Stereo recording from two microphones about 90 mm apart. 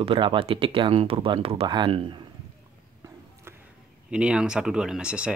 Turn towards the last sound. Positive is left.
turn(degrees=-10)  # may be behind; listen again after turning